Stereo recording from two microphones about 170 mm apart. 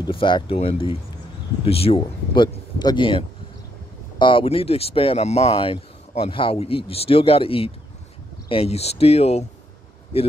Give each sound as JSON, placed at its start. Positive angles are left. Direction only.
{"t": 0.0, "sound": "speech", "side_deg": 30}